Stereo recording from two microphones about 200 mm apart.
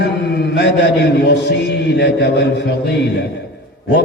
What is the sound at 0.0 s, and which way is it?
Mantra, 55° left (ahead or behind).